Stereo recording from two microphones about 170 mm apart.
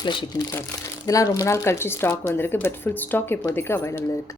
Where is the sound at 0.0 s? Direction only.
25° left (ahead or behind).